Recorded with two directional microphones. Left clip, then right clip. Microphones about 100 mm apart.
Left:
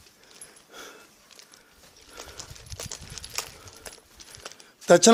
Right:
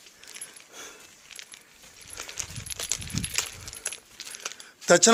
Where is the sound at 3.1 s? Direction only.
25° left (ahead or behind).